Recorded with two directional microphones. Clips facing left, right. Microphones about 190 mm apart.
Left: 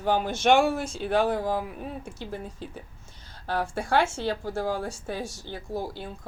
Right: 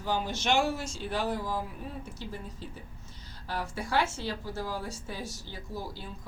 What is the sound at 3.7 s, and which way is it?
Speech, 50° left (ahead or behind).